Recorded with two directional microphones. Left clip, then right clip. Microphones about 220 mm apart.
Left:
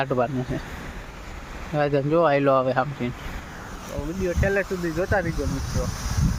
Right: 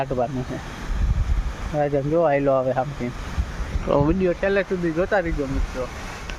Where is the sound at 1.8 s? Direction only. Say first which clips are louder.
Even; 10° left (ahead or behind).